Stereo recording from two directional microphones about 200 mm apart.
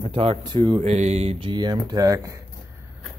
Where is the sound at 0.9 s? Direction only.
35° right (ahead or behind); by 2.4 s 15° right (ahead or behind).